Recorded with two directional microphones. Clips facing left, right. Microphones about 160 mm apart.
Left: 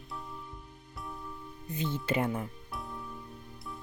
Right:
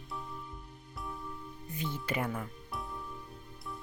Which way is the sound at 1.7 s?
25° left (ahead or behind).